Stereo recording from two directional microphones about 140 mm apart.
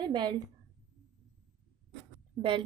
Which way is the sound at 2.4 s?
35° right (ahead or behind).